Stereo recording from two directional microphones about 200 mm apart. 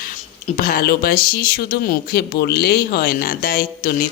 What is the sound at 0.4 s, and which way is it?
Speech, 45° left (ahead or behind).